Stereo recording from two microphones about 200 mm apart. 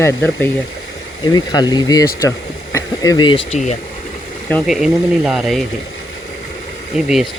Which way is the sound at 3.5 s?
35° left (ahead or behind).